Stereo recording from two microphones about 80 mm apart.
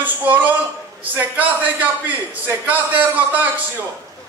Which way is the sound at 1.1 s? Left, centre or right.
Right.